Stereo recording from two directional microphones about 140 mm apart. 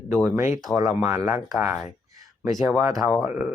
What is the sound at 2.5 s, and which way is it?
Speech, centre (ahead or behind).